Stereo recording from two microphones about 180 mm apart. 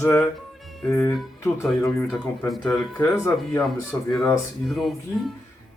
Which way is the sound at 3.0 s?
15° left (ahead or behind).